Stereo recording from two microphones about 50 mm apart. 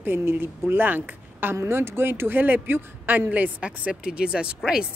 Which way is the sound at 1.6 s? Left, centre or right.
Right.